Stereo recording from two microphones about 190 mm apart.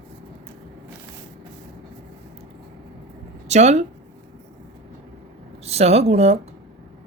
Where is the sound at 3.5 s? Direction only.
35° right (ahead or behind).